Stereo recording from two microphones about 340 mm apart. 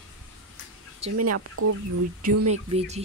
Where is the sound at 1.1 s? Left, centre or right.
Right.